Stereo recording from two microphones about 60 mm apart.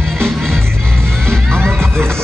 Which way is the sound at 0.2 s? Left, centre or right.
Centre.